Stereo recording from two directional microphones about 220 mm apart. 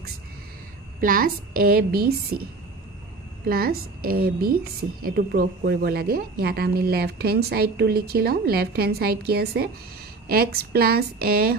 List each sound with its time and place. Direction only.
1.0 s speech: 40° right (ahead or behind)
3.4 s speech: 40° right (ahead or behind)